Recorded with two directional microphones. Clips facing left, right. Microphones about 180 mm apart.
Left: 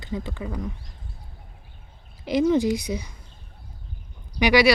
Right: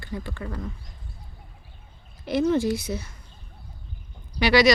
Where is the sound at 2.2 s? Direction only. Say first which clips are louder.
Left 2 dB; 15° left (ahead or behind).